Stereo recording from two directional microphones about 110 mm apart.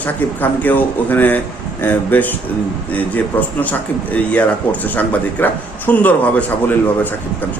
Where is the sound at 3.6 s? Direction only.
15° left (ahead or behind).